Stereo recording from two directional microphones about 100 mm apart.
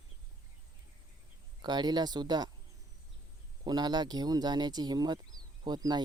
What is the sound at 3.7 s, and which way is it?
Speech, 45° right (ahead or behind).